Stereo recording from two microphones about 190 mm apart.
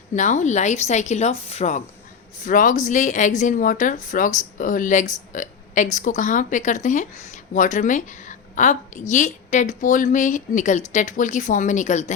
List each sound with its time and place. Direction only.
0.1 s speech: 40° left (ahead or behind)